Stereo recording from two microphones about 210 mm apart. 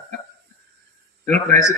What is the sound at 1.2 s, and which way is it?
Speech, 35° right (ahead or behind).